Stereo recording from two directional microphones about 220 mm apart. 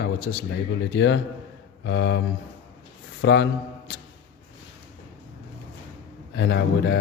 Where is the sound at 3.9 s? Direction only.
45° left (ahead or behind).